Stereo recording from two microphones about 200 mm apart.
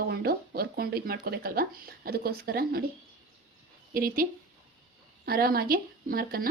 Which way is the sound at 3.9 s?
45° right (ahead or behind).